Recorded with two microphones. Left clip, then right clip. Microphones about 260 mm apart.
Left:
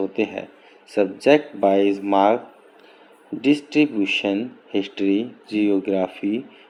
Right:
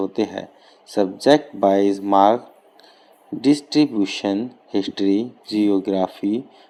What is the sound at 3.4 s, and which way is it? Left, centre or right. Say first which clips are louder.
Speech: right 1 dB; right.